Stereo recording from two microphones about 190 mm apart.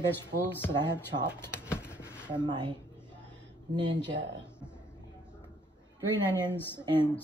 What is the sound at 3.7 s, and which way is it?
Speech, 25° right (ahead or behind).